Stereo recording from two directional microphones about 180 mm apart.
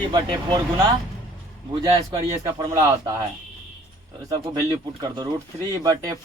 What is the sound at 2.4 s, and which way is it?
Speech, 20° right (ahead or behind).